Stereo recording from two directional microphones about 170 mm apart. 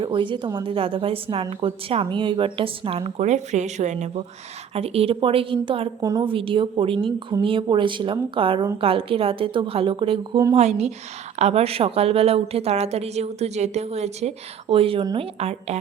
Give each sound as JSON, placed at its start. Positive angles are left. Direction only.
{"t": 0.0, "sound": "speech", "side_deg": -30}